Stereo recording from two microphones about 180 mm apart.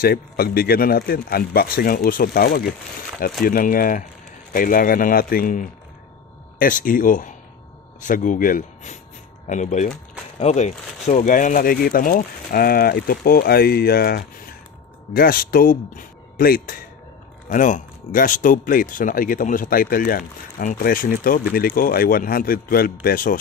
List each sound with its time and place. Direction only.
0.0 s speech: 55° left (ahead or behind)